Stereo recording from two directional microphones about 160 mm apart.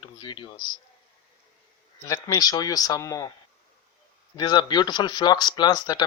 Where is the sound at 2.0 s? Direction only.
20° left (ahead or behind).